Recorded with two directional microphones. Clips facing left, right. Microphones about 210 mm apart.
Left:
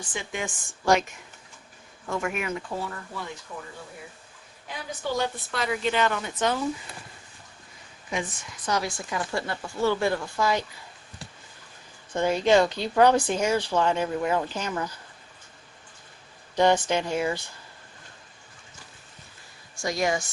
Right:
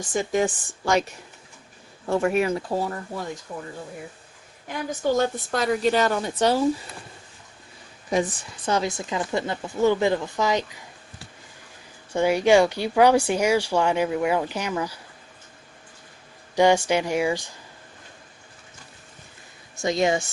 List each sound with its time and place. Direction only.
0.0 s a woman's voice: 45° right (ahead or behind)
2.0 s a woman's voice: 35° right (ahead or behind)
4.7 s a woman's voice: 45° right (ahead or behind)
8.1 s speech: 35° right (ahead or behind); by 10.8 s 20° right (ahead or behind)
12.1 s speech: 10° right (ahead or behind)
16.6 s speech: 10° right (ahead or behind)
19.7 s speech: 20° right (ahead or behind)